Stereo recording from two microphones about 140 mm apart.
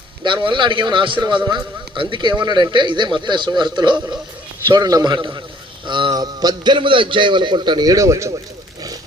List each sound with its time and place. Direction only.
0.3 s a man's voice: 35° right (ahead or behind)